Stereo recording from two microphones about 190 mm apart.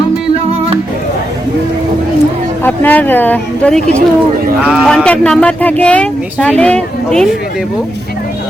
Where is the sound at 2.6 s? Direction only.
10° left (ahead or behind).